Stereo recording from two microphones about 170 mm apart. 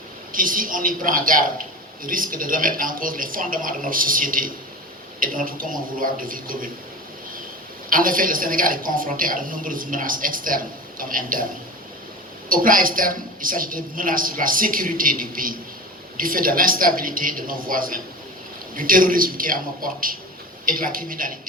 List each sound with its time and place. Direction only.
0.3 s a woman's voice: 55° right (ahead or behind)
7.9 s a woman's voice: 55° right (ahead or behind)
12.5 s a woman's voice: 55° right (ahead or behind)